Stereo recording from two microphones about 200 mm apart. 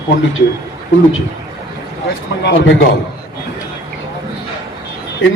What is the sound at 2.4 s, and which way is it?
Speech, 60° left (ahead or behind).